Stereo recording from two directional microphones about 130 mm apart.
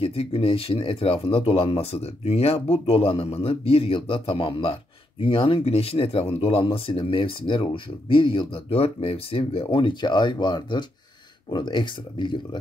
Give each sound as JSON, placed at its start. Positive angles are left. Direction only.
{"t": 0.0, "sound": "speech", "side_deg": 50}